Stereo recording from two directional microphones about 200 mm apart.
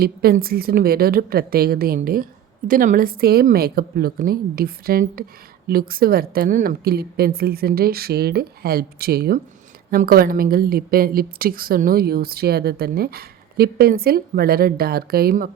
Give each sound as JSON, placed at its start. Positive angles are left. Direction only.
{"t": 0.0, "sound": "a woman's voice", "side_deg": -50}